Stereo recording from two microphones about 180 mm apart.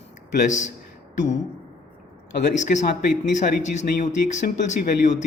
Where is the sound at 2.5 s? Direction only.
40° left (ahead or behind).